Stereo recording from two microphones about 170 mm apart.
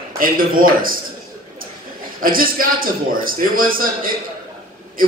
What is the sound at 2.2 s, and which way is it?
A man's voice, 55° right (ahead or behind).